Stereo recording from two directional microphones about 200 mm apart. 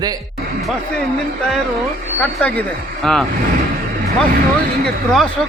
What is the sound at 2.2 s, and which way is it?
Speech, 5° left (ahead or behind).